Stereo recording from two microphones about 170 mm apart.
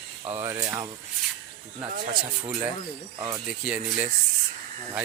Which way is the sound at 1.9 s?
60° right (ahead or behind).